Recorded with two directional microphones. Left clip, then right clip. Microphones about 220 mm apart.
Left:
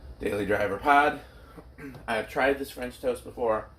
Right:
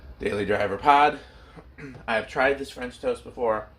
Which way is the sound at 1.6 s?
50° right (ahead or behind).